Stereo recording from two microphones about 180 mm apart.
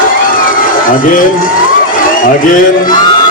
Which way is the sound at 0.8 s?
50° left (ahead or behind).